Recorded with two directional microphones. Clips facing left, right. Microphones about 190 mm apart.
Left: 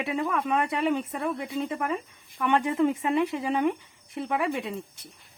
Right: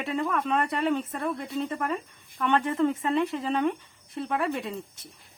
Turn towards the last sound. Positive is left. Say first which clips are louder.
# left 1 dB
turn(degrees=10)  # may be behind; listen again after turning